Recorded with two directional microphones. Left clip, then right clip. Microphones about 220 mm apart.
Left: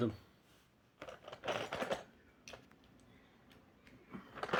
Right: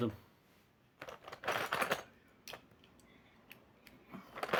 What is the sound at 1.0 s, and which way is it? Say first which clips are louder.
Typewriter: right 2 dB; 30° right (ahead or behind).